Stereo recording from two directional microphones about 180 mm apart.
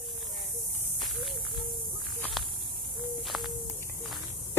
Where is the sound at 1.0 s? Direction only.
Centre (ahead or behind).